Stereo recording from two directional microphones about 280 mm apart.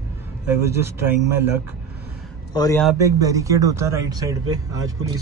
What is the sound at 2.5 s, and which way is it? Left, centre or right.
Speech, centre.